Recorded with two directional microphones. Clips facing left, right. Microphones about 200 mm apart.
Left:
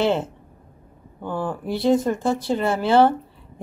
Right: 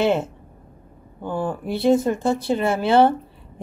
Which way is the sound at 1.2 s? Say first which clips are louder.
Right 1 dB; 10° right (ahead or behind).